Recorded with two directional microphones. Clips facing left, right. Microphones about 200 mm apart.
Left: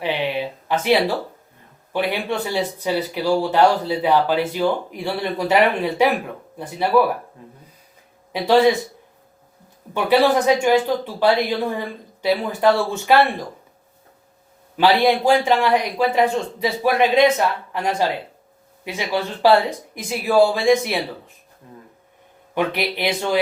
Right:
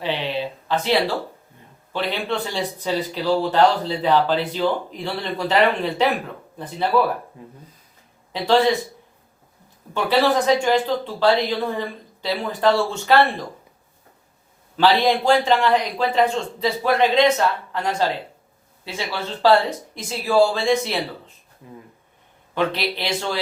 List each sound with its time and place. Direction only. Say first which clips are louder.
0.0 s a sound: left 2 dB; 15° left (ahead or behind)
1.9 s a man's voice: left 2 dB; 15° left (ahead or behind)
8.3 s speech: left 3 dB; 15° left (ahead or behind)
9.9 s a man's voice: left 2 dB; 15° left (ahead or behind)
14.8 s a man's voice: left 1 dB; 15° left (ahead or behind)
21.6 s speech: right 2 dB; 10° right (ahead or behind)
22.5 s a man's voice: left 1 dB; 15° left (ahead or behind)